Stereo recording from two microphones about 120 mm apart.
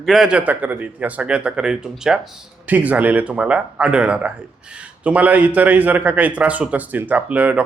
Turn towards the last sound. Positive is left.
turn(degrees=-10)  # may be behind; listen again after turning